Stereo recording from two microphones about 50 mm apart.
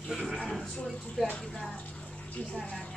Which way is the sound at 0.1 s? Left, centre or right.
Centre.